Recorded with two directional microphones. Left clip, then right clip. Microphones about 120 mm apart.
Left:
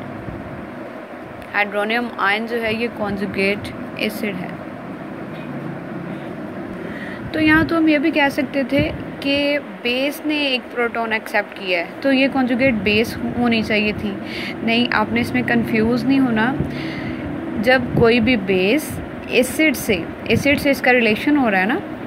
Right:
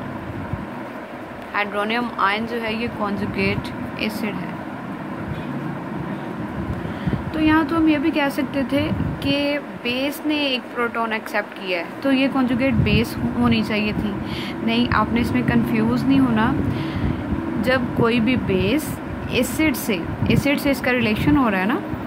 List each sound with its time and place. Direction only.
1.5 s speech: 20° left (ahead or behind)
7.3 s speech: 25° left (ahead or behind)